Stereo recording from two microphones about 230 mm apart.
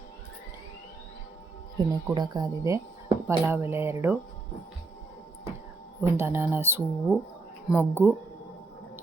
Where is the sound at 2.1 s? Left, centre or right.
Centre.